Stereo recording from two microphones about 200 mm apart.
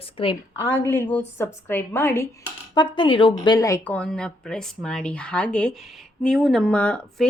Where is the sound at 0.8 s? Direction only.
10° left (ahead or behind).